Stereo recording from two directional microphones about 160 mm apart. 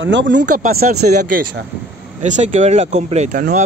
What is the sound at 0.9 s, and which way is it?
Speech, 85° right.